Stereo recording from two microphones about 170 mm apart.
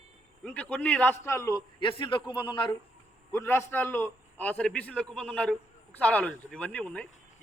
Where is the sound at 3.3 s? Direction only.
15° left (ahead or behind).